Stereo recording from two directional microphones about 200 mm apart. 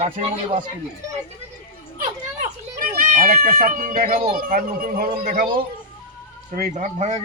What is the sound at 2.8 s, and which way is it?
Speech, 45° right (ahead or behind).